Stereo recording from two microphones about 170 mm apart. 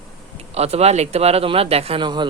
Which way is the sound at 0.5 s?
40° right (ahead or behind).